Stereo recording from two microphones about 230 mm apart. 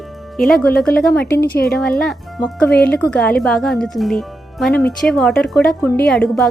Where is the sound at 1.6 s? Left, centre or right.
Centre.